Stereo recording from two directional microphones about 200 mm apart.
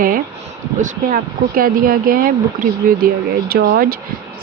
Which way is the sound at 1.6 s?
45° right (ahead or behind).